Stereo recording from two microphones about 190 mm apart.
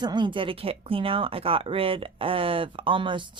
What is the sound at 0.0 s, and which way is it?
Speech, 25° right (ahead or behind).